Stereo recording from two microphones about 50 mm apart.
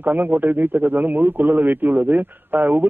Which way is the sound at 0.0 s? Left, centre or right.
Right.